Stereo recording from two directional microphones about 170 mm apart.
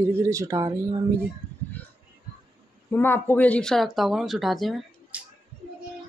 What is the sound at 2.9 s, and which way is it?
Speech, 15° left (ahead or behind).